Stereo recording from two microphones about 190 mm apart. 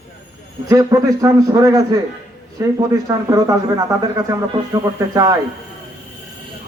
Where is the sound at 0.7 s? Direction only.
15° right (ahead or behind).